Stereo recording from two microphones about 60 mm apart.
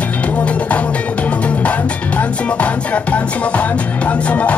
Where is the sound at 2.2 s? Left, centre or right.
Left.